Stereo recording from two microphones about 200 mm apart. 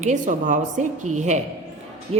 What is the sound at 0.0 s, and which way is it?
A woman's voice, 40° right (ahead or behind).